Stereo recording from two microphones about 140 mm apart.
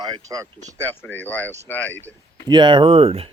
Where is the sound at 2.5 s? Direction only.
35° right (ahead or behind).